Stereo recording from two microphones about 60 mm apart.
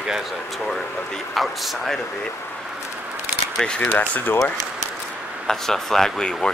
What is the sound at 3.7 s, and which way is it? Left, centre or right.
Speech, left.